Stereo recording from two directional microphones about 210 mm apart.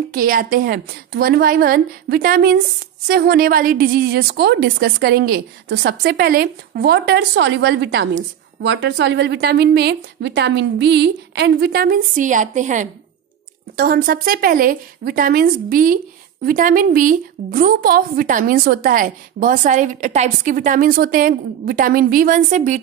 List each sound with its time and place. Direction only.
0.1 s a woman's voice: 40° right (ahead or behind)